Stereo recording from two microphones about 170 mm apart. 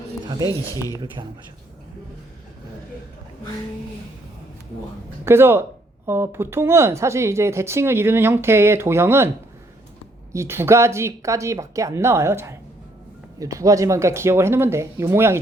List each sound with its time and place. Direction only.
0.4 s speech: 20° left (ahead or behind)
0.9 s speech: 25° right (ahead or behind)
5.2 s speech: 15° right (ahead or behind)
10.3 s speech: 15° right (ahead or behind)